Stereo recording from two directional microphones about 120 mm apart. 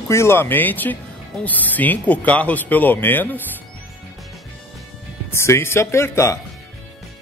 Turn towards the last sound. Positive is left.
turn(degrees=25)  # may be behind; listen again after turning